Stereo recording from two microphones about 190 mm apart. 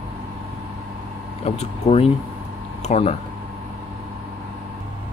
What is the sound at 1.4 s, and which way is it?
Speech, 35° left (ahead or behind).